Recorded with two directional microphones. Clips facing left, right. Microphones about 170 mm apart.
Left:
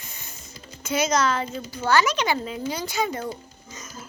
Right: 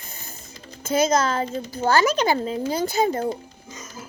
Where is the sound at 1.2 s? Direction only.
40° right (ahead or behind).